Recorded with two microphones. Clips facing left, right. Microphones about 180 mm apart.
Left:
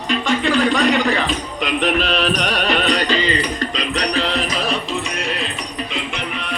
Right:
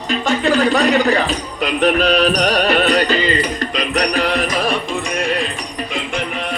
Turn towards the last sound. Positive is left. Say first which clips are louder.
# right 4 dB
turn(degrees=-50)  # may be behind; listen again after turning